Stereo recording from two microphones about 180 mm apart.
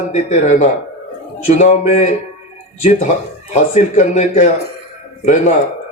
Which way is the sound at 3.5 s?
40° left (ahead or behind).